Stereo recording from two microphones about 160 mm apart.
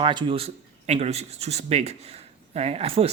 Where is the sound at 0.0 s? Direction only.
30° right (ahead or behind).